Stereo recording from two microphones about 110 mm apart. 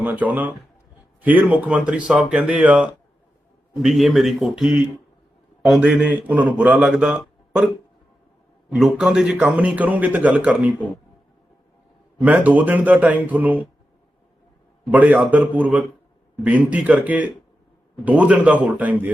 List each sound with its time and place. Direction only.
0.0 s speech: 15° right (ahead or behind)
3.8 s speech: centre (ahead or behind)
5.9 s speech: 15° right (ahead or behind)
8.7 s speech: 5° right (ahead or behind)
12.2 s speech: 15° right (ahead or behind)
14.8 s speech: 15° right (ahead or behind)